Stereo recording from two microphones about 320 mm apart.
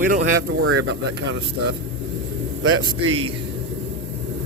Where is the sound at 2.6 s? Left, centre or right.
Right.